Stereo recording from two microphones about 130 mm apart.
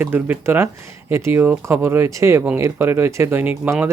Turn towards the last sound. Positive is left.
turn(degrees=-15)  # may be behind; listen again after turning